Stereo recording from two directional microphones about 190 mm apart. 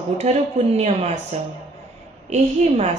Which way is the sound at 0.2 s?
35° right (ahead or behind).